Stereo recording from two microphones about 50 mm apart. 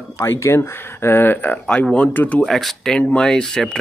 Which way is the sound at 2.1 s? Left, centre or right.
Left.